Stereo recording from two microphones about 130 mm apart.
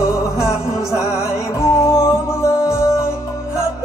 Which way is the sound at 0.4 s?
20° left (ahead or behind).